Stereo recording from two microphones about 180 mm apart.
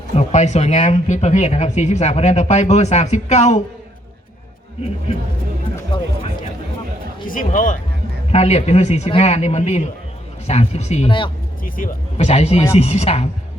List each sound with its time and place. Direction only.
0.1 s speech: 40° left (ahead or behind)
7.3 s speech: 50° left (ahead or behind)
8.3 s speech: 35° left (ahead or behind)
11.6 s speech: 50° left (ahead or behind)
12.1 s speech: 35° left (ahead or behind)